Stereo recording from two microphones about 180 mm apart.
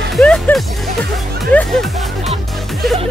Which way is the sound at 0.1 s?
5° left (ahead or behind).